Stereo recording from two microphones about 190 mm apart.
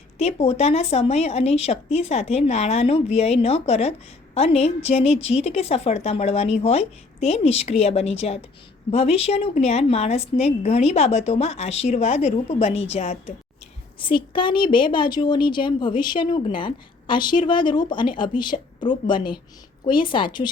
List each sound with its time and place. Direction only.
0.2 s a woman's voice: 35° left (ahead or behind)